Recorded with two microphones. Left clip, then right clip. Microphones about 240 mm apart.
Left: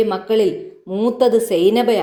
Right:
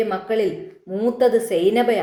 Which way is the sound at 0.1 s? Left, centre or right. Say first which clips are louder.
Left 4 dB; left.